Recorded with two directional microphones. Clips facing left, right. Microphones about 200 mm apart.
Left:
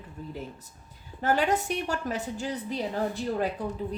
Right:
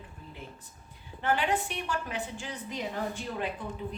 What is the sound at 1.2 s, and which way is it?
A woman's voice, 40° left (ahead or behind).